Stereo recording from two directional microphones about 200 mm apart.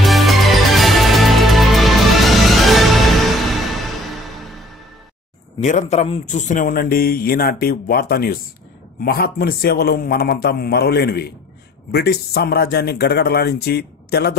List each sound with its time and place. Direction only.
0.0 s music: centre (ahead or behind)
5.6 s a man's voice: 35° left (ahead or behind); by 14.3 s 55° left (ahead or behind)